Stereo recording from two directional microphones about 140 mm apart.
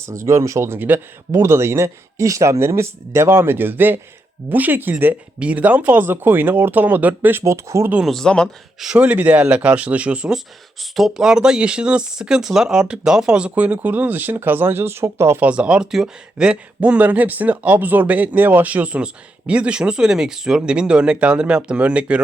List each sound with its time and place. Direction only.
0.3 s speech: 20° right (ahead or behind)
7.9 s speech: centre (ahead or behind)